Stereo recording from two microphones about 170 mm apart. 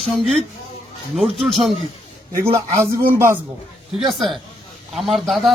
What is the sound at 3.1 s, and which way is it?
Speech, 15° right (ahead or behind).